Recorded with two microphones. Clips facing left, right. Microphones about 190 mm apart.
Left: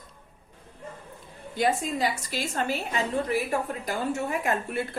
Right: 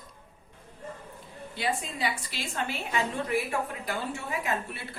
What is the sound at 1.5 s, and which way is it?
A woman's voice, 45° left (ahead or behind).